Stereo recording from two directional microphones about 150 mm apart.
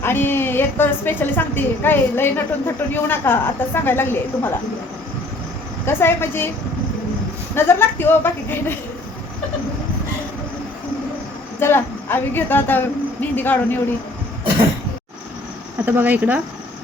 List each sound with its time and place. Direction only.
0.0 s a woman's voice: 15° left (ahead or behind)
5.8 s a woman's voice: 15° left (ahead or behind)
7.5 s a woman's voice: 15° left (ahead or behind)
11.6 s a woman's voice: 15° left (ahead or behind)
15.9 s speech: 10° right (ahead or behind)